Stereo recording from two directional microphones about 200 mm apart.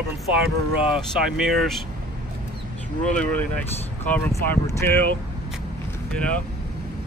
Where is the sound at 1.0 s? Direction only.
Centre (ahead or behind).